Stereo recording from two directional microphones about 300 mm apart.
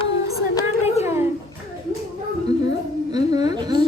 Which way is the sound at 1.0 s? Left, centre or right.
Centre.